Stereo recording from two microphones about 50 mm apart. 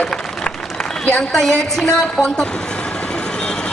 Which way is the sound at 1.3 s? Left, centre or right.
Centre.